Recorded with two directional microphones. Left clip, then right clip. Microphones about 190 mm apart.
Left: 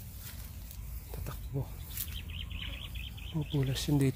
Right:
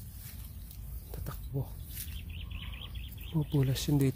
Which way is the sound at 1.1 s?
10° right (ahead or behind).